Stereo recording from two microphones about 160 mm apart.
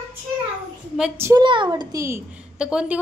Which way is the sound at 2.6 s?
5° right (ahead or behind).